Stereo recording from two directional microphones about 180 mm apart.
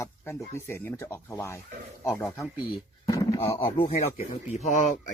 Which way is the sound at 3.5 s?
35° left (ahead or behind).